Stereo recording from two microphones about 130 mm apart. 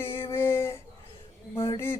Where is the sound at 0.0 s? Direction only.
20° left (ahead or behind).